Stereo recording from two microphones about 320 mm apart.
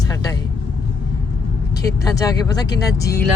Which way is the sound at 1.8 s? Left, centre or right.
Centre.